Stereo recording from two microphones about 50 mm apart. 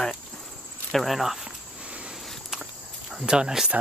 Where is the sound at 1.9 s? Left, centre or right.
Right.